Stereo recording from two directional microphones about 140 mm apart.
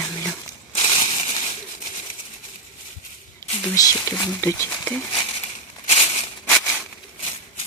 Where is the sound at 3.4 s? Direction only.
25° left (ahead or behind).